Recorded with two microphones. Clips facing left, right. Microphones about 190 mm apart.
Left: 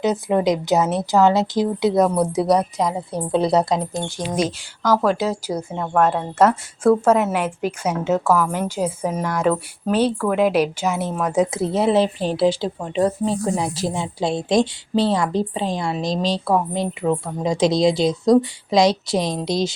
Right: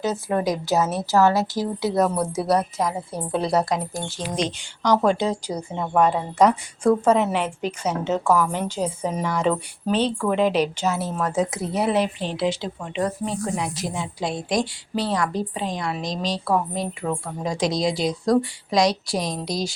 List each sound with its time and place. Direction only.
0.0 s a woman's voice: 20° left (ahead or behind)
4.3 s a woman's voice: 5° left (ahead or behind)
11.5 s a woman's voice: 25° left (ahead or behind)